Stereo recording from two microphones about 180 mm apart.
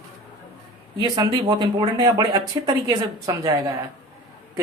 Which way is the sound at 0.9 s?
20° right (ahead or behind).